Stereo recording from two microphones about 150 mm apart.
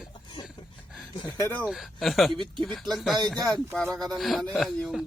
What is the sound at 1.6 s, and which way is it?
A man's voice, centre (ahead or behind).